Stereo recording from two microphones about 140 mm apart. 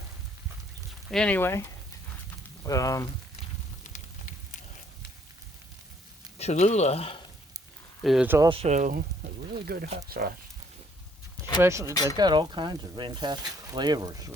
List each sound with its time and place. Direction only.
1.1 s speech: 10° left (ahead or behind)
6.4 s speech: 50° left (ahead or behind)
8.0 s speech: centre (ahead or behind)
8.4 s speech: 50° right (ahead or behind); by 10.3 s 90° right
11.6 s speech: 20° right (ahead or behind)